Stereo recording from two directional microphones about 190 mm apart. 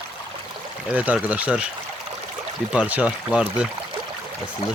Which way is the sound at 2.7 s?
5° right (ahead or behind).